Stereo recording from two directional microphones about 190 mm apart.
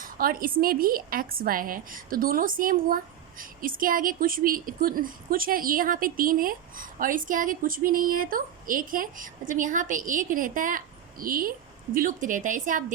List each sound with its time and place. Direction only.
0.0 s a woman's voice: 50° right (ahead or behind)